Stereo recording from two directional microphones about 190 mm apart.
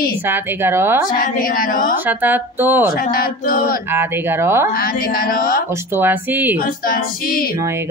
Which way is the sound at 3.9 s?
10° right (ahead or behind).